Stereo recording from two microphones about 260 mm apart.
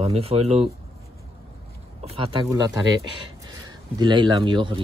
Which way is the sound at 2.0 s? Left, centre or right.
Right.